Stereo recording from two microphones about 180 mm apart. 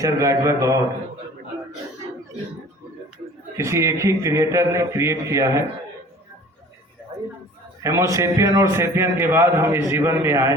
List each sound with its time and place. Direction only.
0.0 s a man's voice: 15° right (ahead or behind)
3.6 s a man's voice: 15° right (ahead or behind)
7.8 s a man's voice: 15° right (ahead or behind)